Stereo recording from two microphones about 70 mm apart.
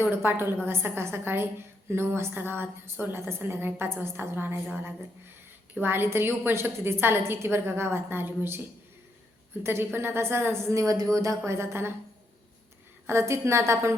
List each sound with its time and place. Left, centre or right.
0.0 s a woman's voice: right
9.6 s a woman's voice: right
13.1 s a woman's voice: right